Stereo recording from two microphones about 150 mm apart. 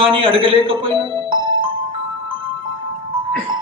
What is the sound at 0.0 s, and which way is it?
Speech, 35° right (ahead or behind).